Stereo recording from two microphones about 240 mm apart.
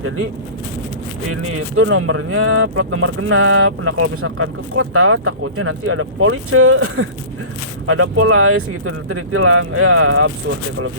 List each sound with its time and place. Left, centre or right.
1.3 s speech: right